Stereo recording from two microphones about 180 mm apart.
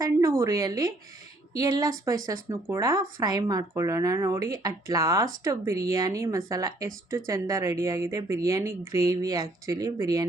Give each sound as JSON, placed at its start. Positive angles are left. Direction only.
{"t": 0.0, "sound": "a woman's voice", "side_deg": -15}